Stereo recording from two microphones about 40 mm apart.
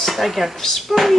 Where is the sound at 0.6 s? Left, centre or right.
Centre.